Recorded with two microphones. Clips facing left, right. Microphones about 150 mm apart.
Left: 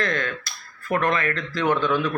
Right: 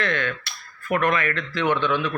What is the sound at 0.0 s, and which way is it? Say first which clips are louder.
Speech: even; 40° left (ahead or behind).